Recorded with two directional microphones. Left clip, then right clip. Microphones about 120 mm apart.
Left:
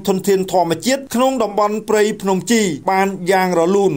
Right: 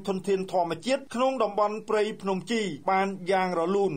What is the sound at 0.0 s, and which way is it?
Speech, 35° left (ahead or behind).